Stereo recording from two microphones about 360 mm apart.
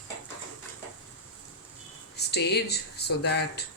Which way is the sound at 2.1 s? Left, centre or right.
Left.